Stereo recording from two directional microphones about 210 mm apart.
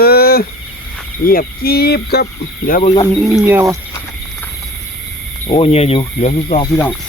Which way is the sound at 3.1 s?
Centre (ahead or behind).